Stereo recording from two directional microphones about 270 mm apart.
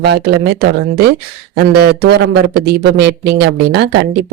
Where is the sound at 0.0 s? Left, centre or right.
Right.